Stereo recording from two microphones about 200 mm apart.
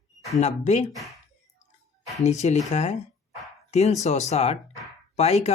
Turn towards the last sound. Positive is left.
turn(degrees=35)  # may be behind; listen again after turning